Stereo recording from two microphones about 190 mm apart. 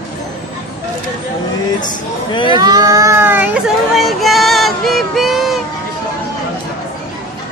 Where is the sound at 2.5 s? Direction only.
20° right (ahead or behind); by 5.6 s centre (ahead or behind).